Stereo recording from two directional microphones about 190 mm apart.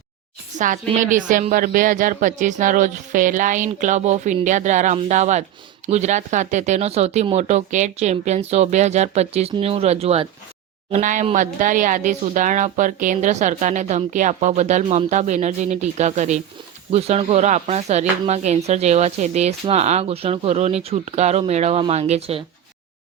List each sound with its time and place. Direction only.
0.5 s speech: 40° right (ahead or behind)